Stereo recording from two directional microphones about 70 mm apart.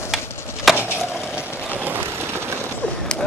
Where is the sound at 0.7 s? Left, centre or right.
Left.